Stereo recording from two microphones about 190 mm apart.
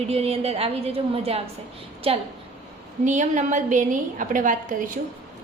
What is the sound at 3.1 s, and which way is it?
A woman's voice, 40° right (ahead or behind).